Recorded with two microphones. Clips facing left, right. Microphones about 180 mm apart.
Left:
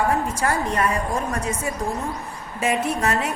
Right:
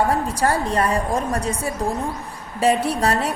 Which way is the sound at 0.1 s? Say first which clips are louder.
Right 2 dB; 35° right (ahead or behind).